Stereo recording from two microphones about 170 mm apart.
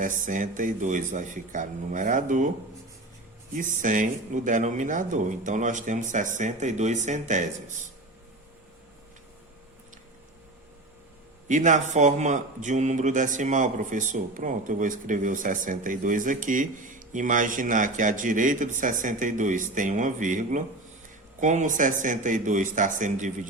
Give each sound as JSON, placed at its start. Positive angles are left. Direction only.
{"t": 0.0, "sound": "speech", "side_deg": -50}
{"t": 3.5, "sound": "speech", "side_deg": -50}
{"t": 11.4, "sound": "speech", "side_deg": -45}